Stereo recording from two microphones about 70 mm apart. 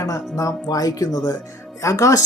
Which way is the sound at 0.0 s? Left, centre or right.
Left.